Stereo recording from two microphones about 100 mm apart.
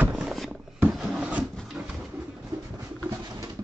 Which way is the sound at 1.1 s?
10° right (ahead or behind).